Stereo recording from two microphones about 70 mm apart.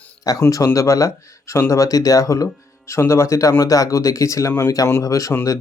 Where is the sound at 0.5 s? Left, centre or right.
Left.